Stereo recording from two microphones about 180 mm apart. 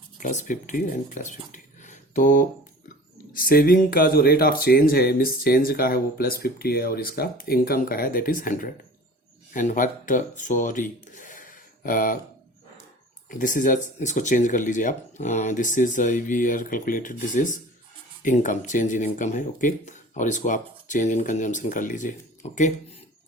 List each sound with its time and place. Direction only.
0.2 s speech: 45° left (ahead or behind)
13.2 s speech: 45° left (ahead or behind)